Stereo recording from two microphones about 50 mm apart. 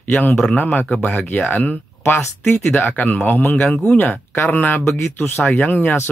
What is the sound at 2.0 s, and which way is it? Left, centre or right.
Speech, left.